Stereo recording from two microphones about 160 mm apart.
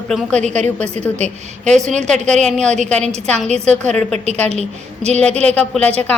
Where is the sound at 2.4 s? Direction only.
5° left (ahead or behind).